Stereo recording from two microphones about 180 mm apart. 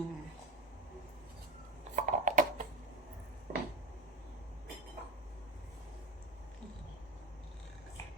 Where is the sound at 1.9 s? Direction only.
45° right (ahead or behind).